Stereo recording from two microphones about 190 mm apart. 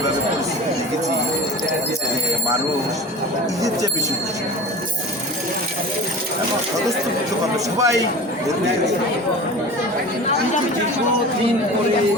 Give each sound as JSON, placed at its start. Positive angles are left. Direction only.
{"t": 7.8, "sound": "speech", "side_deg": -15}